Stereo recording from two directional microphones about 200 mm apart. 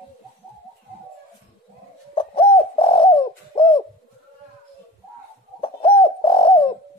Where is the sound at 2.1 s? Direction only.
25° left (ahead or behind).